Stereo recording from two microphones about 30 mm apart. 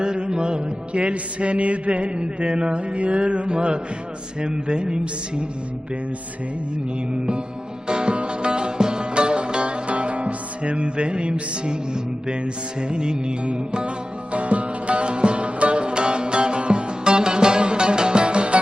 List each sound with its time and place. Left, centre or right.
0.0 s music: right
2.1 s music: right
4.4 s speech: right
7.1 s music: right
14.3 s music: right
15.8 s music: right